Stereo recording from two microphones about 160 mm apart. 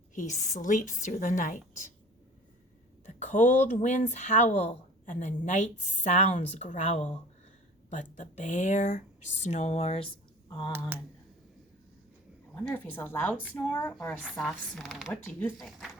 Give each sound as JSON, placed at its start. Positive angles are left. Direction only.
{"t": 0.1, "sound": "speech", "side_deg": 50}
{"t": 3.1, "sound": "speech", "side_deg": 50}
{"t": 12.5, "sound": "speech", "side_deg": 10}
{"t": 15.1, "sound": "speech", "side_deg": 10}
{"t": 15.5, "sound": "speech", "side_deg": 0}